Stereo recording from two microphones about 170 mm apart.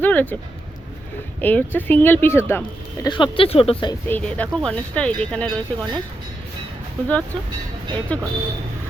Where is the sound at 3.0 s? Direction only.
30° left (ahead or behind).